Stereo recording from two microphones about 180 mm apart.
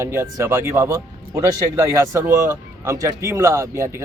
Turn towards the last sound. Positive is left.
turn(degrees=-15)  # may be behind; listen again after turning